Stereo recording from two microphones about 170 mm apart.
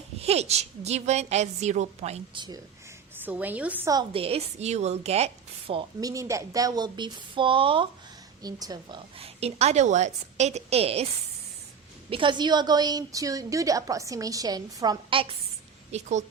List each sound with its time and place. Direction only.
0.2 s a woman's voice: 40° right (ahead or behind)
3.2 s a woman's voice: 10° right (ahead or behind)
4.1 s a woman's voice: 35° right (ahead or behind)
6.0 s a woman's voice: 20° right (ahead or behind); by 11.0 s 35° right (ahead or behind)
12.1 s a woman's voice: 30° right (ahead or behind)
15.9 s speech: 40° right (ahead or behind)